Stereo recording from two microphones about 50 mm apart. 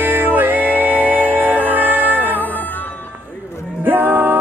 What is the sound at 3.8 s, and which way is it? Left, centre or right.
Music, right.